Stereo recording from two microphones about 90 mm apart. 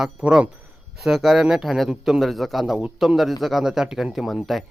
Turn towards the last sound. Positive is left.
turn(degrees=0)  # may be behind; listen again after turning